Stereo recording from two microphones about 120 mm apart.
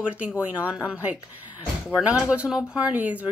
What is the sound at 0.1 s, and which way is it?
Speech, 10° right (ahead or behind).